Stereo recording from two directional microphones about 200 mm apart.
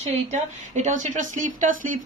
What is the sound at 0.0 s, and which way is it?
A woman's voice, 35° right (ahead or behind).